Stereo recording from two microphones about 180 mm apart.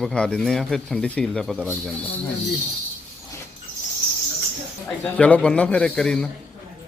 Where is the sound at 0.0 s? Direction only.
5° left (ahead or behind).